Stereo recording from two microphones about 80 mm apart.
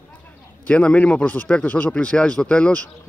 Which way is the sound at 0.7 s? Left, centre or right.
Centre.